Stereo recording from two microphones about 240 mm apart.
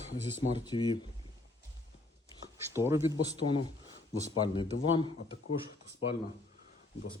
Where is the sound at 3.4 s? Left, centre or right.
Left.